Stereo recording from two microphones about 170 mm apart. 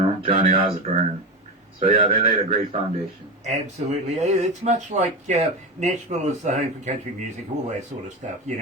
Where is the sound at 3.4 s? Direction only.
40° right (ahead or behind).